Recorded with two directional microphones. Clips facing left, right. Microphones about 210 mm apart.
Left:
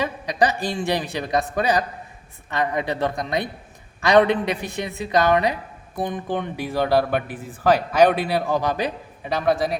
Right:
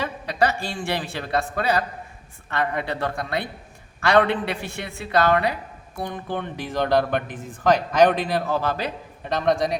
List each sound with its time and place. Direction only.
0.0 s a man's voice: 15° left (ahead or behind)